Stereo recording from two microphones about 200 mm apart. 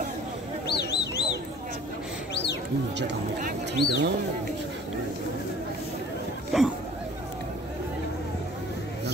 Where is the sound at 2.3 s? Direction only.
60° left (ahead or behind).